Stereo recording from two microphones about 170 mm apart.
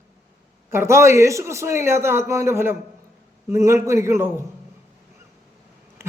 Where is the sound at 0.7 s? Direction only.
15° right (ahead or behind).